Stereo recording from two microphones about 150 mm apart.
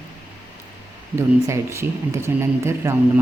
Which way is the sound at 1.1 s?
20° right (ahead or behind).